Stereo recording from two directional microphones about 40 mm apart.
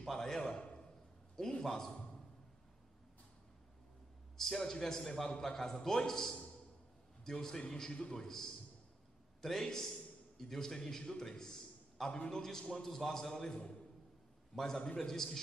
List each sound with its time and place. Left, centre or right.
0.0 s a man's voice: centre
4.4 s a man's voice: centre